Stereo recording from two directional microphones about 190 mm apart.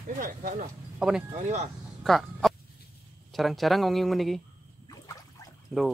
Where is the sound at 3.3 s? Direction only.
Centre (ahead or behind).